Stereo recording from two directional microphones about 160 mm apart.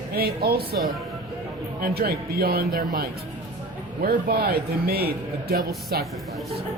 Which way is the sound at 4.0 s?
75° right (ahead or behind).